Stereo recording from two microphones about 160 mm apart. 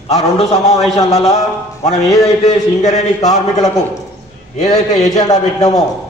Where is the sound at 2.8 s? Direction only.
45° left (ahead or behind).